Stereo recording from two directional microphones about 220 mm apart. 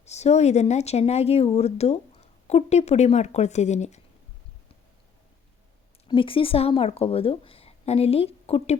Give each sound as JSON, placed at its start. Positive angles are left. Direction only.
{"t": 0.0, "sound": "a woman's voice", "side_deg": 30}
{"t": 6.1, "sound": "a woman's voice", "side_deg": 25}